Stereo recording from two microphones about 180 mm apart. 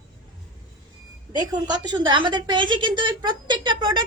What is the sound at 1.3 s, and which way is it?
A woman's voice, 20° right (ahead or behind).